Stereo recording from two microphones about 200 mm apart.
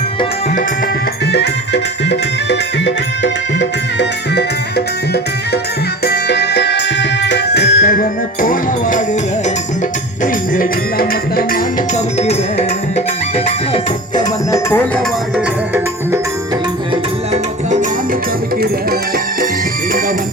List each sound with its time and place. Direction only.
1.3 s music: 55° left (ahead or behind)
6.1 s music: 55° left (ahead or behind)
10.5 s music: 45° left (ahead or behind)
12.2 s music: 30° left (ahead or behind)
14.2 s music: 15° left (ahead or behind)
16.9 s music: 30° right (ahead or behind)